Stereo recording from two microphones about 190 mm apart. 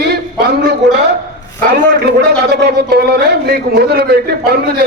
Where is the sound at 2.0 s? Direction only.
60° right (ahead or behind).